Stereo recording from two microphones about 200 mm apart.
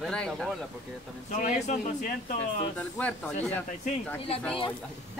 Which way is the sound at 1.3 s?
40° left (ahead or behind).